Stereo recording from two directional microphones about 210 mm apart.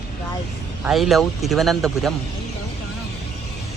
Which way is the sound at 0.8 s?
Centre (ahead or behind).